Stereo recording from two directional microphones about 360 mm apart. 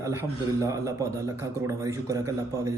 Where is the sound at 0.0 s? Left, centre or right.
Centre.